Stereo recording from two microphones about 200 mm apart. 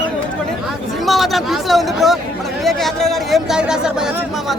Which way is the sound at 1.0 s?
Centre (ahead or behind).